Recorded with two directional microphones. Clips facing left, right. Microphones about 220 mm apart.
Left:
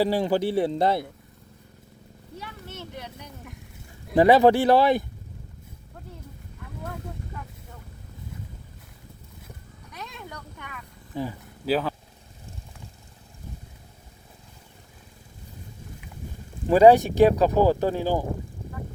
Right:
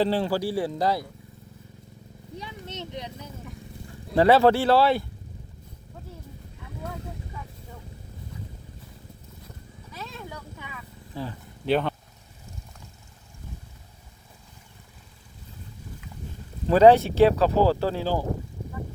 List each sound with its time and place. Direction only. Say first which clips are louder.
0.0 s speech: left 1 dB; 15° left (ahead or behind)
2.4 s speech: right 2 dB; 20° right (ahead or behind)
4.1 s speech: left 2 dB; 15° left (ahead or behind)
10.0 s vehicle: right 1 dB; 5° right (ahead or behind)
11.1 s speech: left 4 dB; 15° left (ahead or behind)
11.6 s speech: right 1 dB; centre (ahead or behind)
16.6 s speech: left 1 dB; 15° left (ahead or behind)